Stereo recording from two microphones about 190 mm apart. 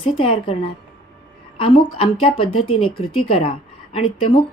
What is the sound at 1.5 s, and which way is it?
Speech, 30° left (ahead or behind).